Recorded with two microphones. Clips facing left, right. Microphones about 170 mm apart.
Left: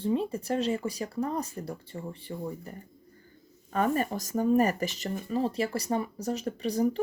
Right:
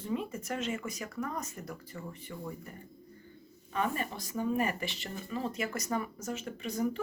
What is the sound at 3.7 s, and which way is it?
A woman's voice, 45° left (ahead or behind).